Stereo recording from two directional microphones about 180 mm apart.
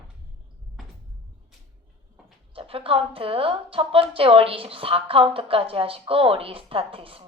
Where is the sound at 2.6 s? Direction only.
30° right (ahead or behind).